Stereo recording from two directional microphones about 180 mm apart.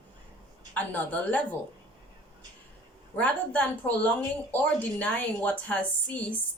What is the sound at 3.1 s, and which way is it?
A woman's voice, 10° left (ahead or behind).